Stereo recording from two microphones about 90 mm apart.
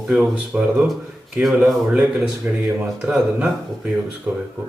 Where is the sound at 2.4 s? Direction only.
20° right (ahead or behind).